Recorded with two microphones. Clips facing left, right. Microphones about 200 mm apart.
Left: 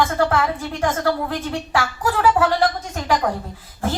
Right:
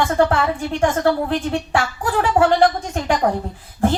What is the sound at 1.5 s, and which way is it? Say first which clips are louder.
A woman's voice: right 2 dB; 30° right (ahead or behind).